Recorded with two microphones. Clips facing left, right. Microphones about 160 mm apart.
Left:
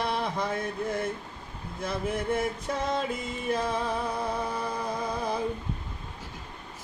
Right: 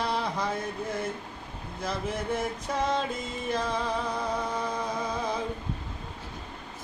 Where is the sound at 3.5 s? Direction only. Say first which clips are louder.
Left 2 dB; 5° left (ahead or behind).